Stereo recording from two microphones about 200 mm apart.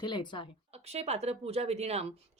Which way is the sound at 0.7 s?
30° right (ahead or behind).